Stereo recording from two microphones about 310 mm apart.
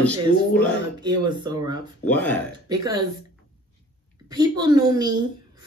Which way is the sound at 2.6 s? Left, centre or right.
Centre.